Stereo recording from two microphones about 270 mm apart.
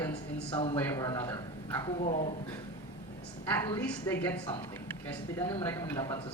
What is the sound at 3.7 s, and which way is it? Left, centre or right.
A woman's voice, centre.